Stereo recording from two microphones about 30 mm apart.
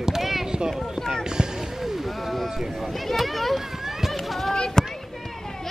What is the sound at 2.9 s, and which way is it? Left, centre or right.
Children playing, centre.